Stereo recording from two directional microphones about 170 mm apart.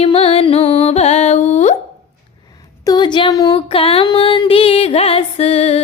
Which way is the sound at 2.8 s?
25° left (ahead or behind).